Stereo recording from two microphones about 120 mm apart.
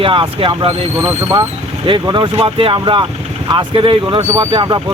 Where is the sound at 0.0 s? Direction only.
45° right (ahead or behind).